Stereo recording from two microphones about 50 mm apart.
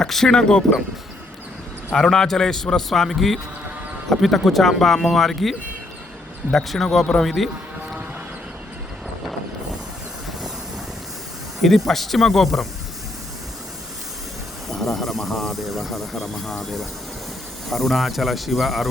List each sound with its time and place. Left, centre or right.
0.0 s a man's voice: centre
1.9 s a man's voice: centre
11.6 s speech: centre
14.7 s speech: centre